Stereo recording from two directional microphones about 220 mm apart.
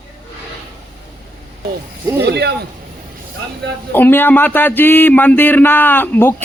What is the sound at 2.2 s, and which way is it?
Speech, 50° right (ahead or behind).